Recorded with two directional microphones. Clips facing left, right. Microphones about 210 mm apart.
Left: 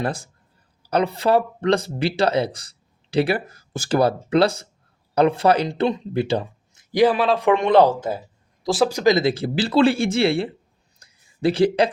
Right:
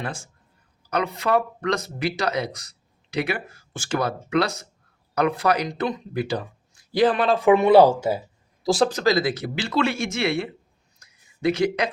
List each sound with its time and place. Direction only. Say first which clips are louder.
0.0 s speech: left 6 dB; 35° left (ahead or behind)
6.9 s speech: left 2 dB; 10° left (ahead or behind); by 8.2 s 10° right (ahead or behind)
8.6 s speech: left 1 dB; centre (ahead or behind)
8.9 s speech: left 3 dB; 15° left (ahead or behind)
11.0 s a sound: left 2 dB; 30° left (ahead or behind)